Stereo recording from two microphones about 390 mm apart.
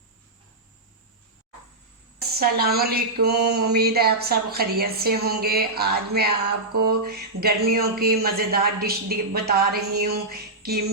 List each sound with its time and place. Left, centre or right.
2.3 s speech: right